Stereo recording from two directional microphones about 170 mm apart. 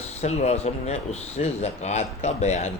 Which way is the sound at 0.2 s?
40° left (ahead or behind).